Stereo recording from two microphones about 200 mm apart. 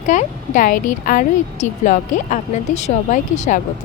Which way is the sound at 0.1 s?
40° left (ahead or behind).